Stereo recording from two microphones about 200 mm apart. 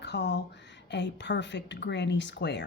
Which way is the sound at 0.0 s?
60° left (ahead or behind).